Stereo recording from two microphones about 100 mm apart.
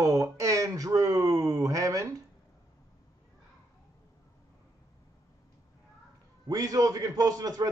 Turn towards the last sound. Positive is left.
turn(degrees=-40)  # may be behind; listen again after turning